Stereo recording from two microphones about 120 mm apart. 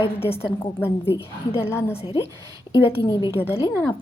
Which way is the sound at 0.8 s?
20° left (ahead or behind).